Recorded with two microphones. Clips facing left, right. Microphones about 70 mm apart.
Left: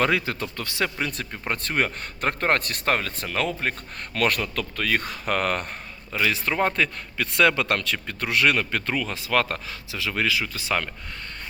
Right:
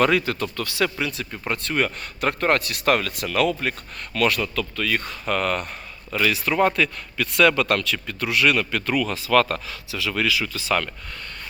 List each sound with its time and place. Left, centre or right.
0.0 s a man's voice: left
1.1 s speech: left
2.8 s a man's voice: left
4.2 s speech: left
6.1 s a man's voice: left